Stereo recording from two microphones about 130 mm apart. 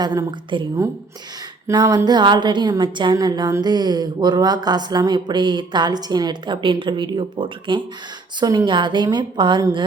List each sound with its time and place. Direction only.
0.0 s a woman's voice: 30° right (ahead or behind)